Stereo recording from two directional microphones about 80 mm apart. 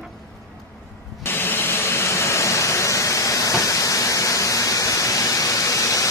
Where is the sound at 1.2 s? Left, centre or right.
Left.